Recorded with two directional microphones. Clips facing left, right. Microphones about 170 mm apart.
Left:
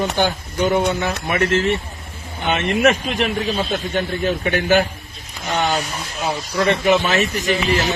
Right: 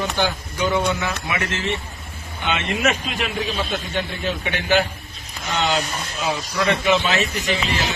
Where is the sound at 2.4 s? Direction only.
50° left (ahead or behind).